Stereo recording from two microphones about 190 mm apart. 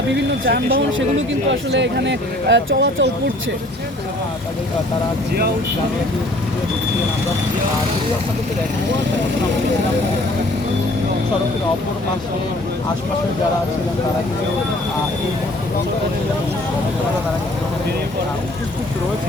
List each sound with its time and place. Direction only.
0.1 s speech: 60° right (ahead or behind)